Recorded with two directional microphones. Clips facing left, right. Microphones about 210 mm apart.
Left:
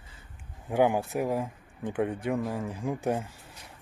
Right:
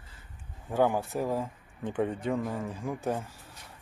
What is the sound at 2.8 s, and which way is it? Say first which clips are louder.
Speech: left 3 dB; 20° left (ahead or behind).